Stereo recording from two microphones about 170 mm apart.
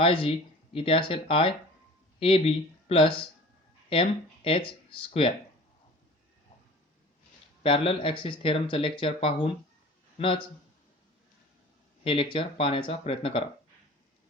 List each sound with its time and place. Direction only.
0.0 s speech: 30° left (ahead or behind)
7.6 s speech: 35° left (ahead or behind)
12.0 s speech: 30° left (ahead or behind)